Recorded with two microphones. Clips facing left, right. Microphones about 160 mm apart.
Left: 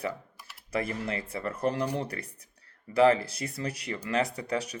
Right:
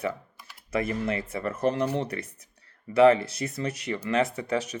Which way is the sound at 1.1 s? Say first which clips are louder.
Right 3 dB; 30° left (ahead or behind).